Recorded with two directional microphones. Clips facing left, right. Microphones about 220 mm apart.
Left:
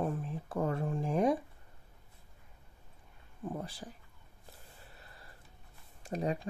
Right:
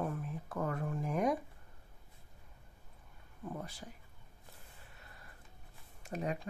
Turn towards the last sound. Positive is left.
turn(degrees=35)  # may be behind; listen again after turning